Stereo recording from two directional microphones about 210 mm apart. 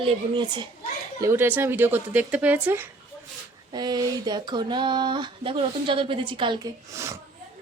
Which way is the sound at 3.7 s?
20° right (ahead or behind).